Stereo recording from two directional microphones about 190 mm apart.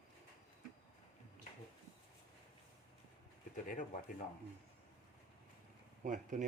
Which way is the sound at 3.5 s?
45° left (ahead or behind).